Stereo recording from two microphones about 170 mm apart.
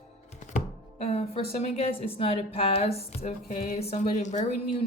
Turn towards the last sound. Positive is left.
turn(degrees=45)  # may be behind; listen again after turning